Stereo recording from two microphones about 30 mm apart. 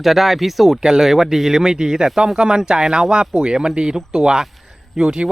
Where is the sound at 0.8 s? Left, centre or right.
Centre.